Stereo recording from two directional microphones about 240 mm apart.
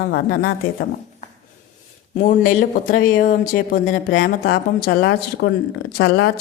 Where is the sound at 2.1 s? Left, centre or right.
Left.